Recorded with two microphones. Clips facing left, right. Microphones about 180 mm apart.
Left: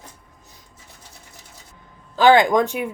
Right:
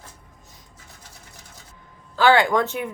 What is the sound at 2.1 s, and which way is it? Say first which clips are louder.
Speech: left 3 dB; 15° left (ahead or behind).